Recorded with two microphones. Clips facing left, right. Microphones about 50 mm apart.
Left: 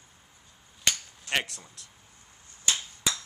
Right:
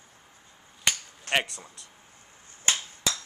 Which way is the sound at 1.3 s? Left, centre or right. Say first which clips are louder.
Right 3 dB; centre.